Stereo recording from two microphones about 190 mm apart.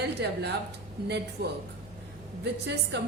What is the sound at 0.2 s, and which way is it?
Speech, 60° right (ahead or behind).